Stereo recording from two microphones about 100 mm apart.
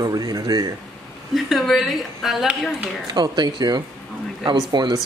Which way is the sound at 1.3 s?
Centre (ahead or behind).